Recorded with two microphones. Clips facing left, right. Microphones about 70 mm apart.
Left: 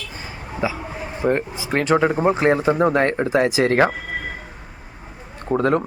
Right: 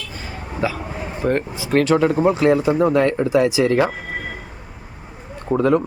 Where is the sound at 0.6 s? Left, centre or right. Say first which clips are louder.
Right 1 dB; centre; by 3.9 s left.